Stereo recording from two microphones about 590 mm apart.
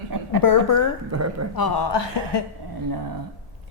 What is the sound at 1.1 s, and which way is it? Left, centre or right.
Speech, right.